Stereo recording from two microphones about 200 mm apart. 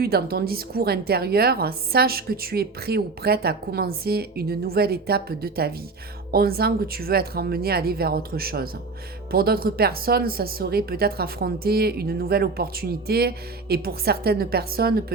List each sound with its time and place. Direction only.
0.0 s a woman's voice: 50° right (ahead or behind)